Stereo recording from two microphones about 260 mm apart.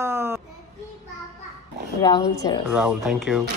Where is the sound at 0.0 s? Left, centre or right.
Centre.